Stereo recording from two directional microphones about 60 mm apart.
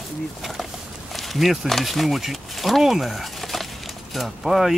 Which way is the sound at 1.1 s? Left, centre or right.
Centre.